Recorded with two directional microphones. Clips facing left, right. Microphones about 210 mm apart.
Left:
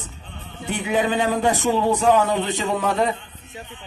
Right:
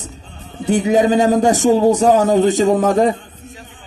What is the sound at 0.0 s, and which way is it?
A man's voice, 40° right (ahead or behind).